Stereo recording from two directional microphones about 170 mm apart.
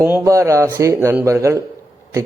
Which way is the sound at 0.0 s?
15° right (ahead or behind).